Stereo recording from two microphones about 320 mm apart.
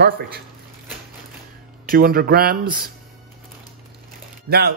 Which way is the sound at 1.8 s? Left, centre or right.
Right.